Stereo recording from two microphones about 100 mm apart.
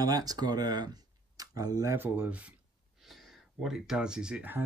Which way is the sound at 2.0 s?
20° right (ahead or behind).